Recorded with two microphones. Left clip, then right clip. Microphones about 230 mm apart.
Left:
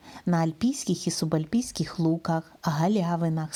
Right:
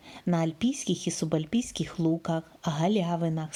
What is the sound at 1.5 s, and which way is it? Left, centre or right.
Speech, left.